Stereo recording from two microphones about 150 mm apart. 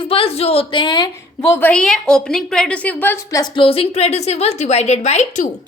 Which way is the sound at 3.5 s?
40° left (ahead or behind).